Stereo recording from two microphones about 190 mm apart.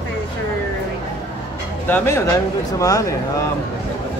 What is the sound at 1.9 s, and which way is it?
Speech, 10° left (ahead or behind).